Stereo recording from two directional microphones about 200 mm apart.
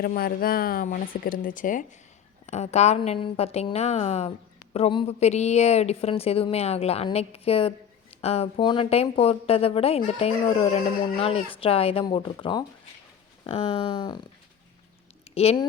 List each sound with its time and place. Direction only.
0.0 s a woman's voice: 50° left (ahead or behind); by 14.3 s 20° left (ahead or behind)
15.4 s speech: 30° left (ahead or behind)